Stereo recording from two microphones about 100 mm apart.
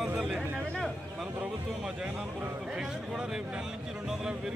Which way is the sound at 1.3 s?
15° right (ahead or behind).